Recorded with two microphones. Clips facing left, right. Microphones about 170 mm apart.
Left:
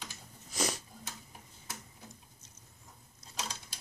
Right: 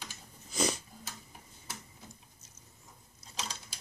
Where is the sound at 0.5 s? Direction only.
Centre (ahead or behind).